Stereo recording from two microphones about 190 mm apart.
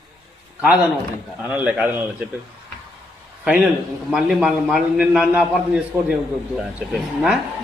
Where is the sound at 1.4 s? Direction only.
5° right (ahead or behind).